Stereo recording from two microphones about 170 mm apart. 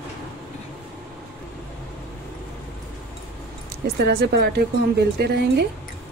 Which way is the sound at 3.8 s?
65° right (ahead or behind).